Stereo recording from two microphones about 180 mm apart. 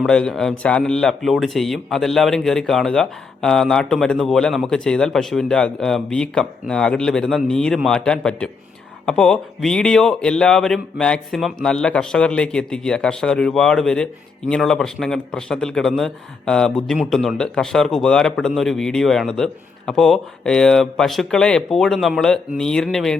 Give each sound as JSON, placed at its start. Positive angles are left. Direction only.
{"t": 0.0, "sound": "a man's voice", "side_deg": 5}